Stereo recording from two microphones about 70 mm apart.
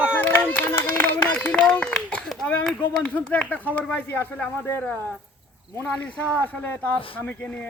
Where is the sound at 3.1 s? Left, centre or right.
Left.